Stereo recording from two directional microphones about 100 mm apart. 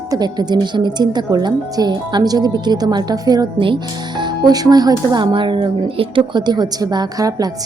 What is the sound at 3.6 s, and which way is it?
Speech, 55° right (ahead or behind).